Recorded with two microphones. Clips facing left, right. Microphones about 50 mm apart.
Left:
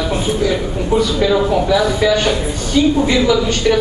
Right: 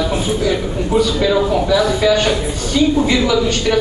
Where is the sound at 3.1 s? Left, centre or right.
Centre.